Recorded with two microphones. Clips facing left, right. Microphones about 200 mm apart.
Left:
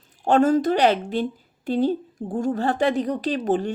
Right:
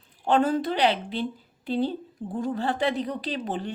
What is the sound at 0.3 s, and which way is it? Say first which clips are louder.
A woman's voice: left 5 dB; 45° left (ahead or behind).